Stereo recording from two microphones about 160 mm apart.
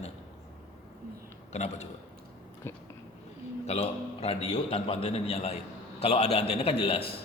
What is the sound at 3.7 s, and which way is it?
A man's voice, 40° left (ahead or behind).